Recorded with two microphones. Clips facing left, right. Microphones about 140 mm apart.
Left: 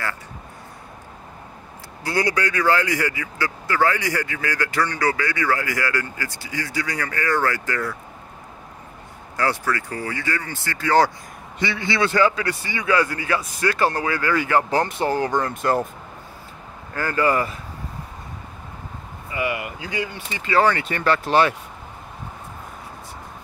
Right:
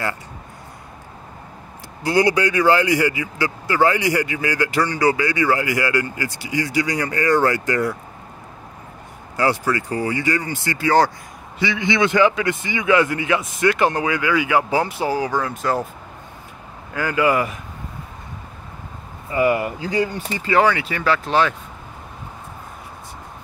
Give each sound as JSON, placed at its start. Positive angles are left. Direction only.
{"t": 2.0, "sound": "a man's voice", "side_deg": -15}
{"t": 9.4, "sound": "a man's voice", "side_deg": -15}
{"t": 16.9, "sound": "a man's voice", "side_deg": -15}
{"t": 19.3, "sound": "speech", "side_deg": -35}
{"t": 20.6, "sound": "speech", "side_deg": -10}